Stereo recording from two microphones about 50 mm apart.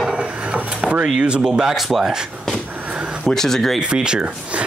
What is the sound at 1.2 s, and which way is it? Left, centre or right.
Speech, centre.